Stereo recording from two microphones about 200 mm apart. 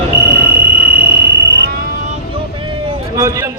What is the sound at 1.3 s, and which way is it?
Fire alarm, 55° right (ahead or behind).